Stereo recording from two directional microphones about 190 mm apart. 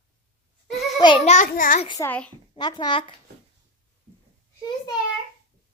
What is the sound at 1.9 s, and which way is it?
Speech, 15° left (ahead or behind).